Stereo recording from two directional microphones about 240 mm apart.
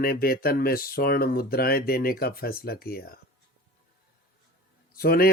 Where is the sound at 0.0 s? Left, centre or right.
Left.